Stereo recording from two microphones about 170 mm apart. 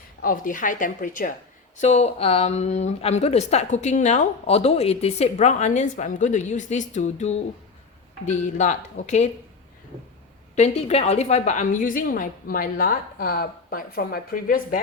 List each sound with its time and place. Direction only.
0.2 s a woman's voice: 55° left (ahead or behind)
1.8 s a woman's voice: 40° left (ahead or behind)
10.5 s a woman's voice: 40° left (ahead or behind)